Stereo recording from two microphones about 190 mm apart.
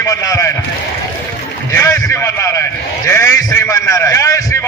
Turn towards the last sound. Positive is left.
turn(degrees=15)  # may be behind; listen again after turning